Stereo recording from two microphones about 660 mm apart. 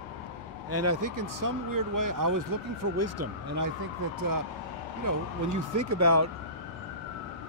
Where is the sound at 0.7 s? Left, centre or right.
Right.